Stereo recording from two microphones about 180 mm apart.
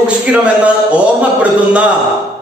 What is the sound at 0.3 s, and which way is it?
Speech, 5° right (ahead or behind).